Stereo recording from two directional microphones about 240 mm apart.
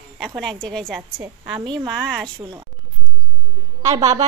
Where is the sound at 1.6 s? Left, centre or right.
Centre.